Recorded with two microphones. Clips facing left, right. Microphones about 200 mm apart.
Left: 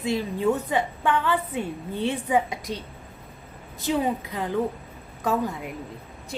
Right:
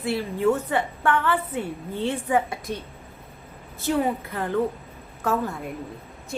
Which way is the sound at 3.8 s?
15° left (ahead or behind).